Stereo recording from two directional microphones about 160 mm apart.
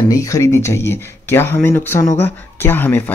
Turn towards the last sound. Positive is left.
turn(degrees=10)  # may be behind; listen again after turning